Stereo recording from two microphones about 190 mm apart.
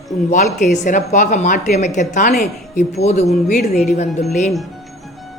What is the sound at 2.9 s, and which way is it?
Speech, 35° left (ahead or behind).